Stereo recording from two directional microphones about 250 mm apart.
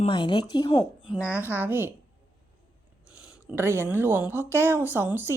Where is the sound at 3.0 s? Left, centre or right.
Centre.